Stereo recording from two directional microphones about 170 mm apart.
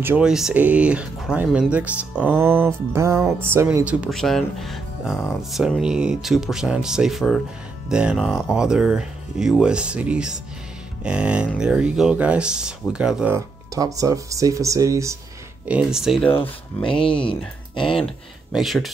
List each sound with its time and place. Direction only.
0.0 s speech: 10° right (ahead or behind)
13.3 s speech: 20° right (ahead or behind)
15.7 s speech: 5° right (ahead or behind)
16.8 s speech: 30° left (ahead or behind)
18.5 s speech: centre (ahead or behind)